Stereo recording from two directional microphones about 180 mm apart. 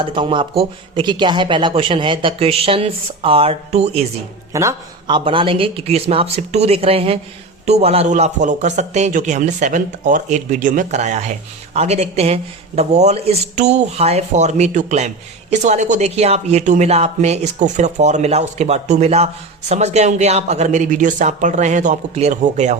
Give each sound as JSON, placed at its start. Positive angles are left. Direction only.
{"t": 0.0, "sound": "speech", "side_deg": -30}
{"t": 4.5, "sound": "speech", "side_deg": -20}